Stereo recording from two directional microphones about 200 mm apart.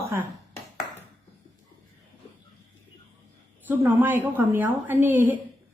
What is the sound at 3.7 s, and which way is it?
A woman's voice, 10° right (ahead or behind).